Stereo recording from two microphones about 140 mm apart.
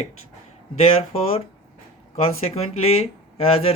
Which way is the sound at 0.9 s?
45° left (ahead or behind).